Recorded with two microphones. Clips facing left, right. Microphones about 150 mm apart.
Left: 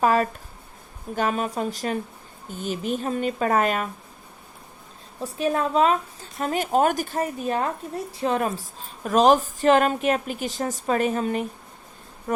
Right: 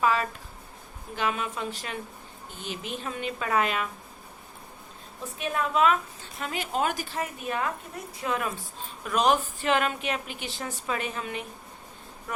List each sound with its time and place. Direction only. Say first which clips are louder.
0.0 s a woman's voice: left 5 dB; 45° left (ahead or behind)
5.2 s a woman's voice: left 6 dB; 35° left (ahead or behind)
6.4 s a woman's voice: left 8 dB; 45° left (ahead or behind)